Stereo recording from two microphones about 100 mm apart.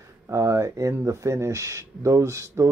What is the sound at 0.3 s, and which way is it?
Speech, 30° right (ahead or behind).